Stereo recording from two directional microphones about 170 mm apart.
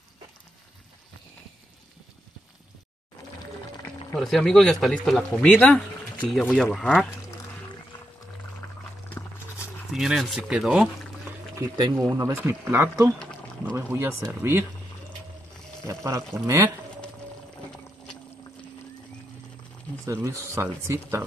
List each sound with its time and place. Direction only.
4.1 s speech: 5° left (ahead or behind)
9.9 s speech: centre (ahead or behind)
11.5 s speech: 25° right (ahead or behind)
12.6 s speech: 10° right (ahead or behind)
15.9 s speech: 20° right (ahead or behind)
20.1 s speech: 15° right (ahead or behind)